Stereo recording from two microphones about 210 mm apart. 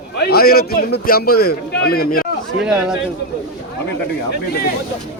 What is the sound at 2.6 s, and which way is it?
Speech, 5° right (ahead or behind).